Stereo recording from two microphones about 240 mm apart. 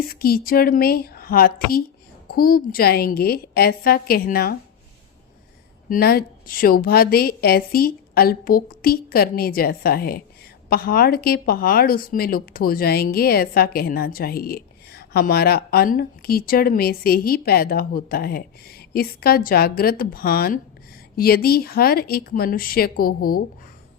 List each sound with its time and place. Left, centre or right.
0.1 s a woman's voice: left
5.9 s a woman's voice: left